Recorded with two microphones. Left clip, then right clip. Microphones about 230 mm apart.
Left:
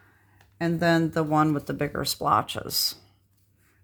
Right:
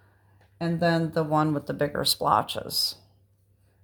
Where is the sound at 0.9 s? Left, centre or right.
Left.